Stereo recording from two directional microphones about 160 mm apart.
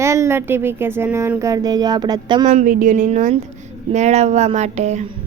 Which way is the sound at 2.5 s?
55° right (ahead or behind).